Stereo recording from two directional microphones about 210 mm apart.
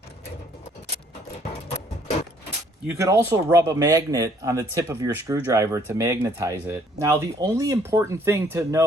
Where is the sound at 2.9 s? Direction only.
15° right (ahead or behind).